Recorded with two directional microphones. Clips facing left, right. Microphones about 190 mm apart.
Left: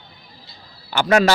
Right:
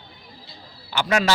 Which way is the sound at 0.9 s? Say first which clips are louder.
Left 6 dB; 45° left (ahead or behind).